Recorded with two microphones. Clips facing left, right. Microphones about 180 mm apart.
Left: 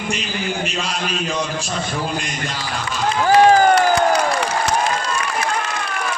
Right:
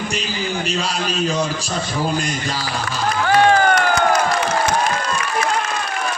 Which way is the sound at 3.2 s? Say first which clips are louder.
Left 3 dB; 35° left (ahead or behind).